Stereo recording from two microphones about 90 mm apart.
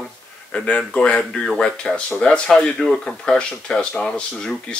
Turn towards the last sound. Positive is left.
turn(degrees=10)  # may be behind; listen again after turning